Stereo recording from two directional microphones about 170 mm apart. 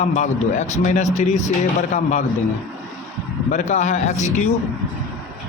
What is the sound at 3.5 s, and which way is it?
Speech, 45° left (ahead or behind).